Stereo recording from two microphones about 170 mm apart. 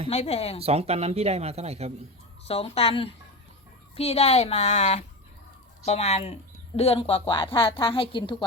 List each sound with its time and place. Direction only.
0.1 s a woman's voice: 40° left (ahead or behind)
0.6 s speech: 35° right (ahead or behind)
2.5 s a woman's voice: 35° left (ahead or behind)